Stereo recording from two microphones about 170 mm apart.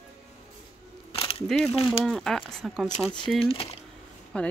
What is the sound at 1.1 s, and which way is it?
Camera, 35° left (ahead or behind).